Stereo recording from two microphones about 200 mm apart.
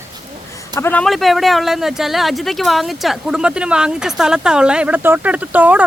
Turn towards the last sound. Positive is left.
turn(degrees=-10)  # may be behind; listen again after turning